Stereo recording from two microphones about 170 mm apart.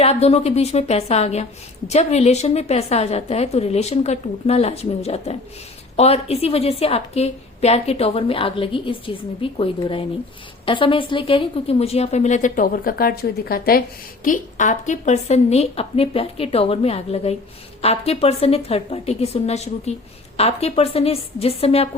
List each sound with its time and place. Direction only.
0.0 s a woman's voice: 40° left (ahead or behind); by 13.8 s 60° left (ahead or behind)
14.3 s a woman's voice: 45° left (ahead or behind)